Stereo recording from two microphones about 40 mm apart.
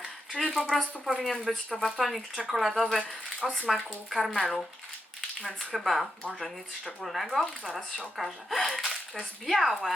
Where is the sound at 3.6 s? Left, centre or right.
Centre.